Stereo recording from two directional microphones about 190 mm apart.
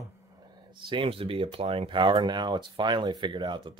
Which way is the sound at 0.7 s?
25° right (ahead or behind).